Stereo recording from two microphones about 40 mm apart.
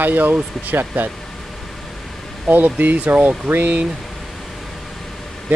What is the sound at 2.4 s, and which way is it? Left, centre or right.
Speech, right.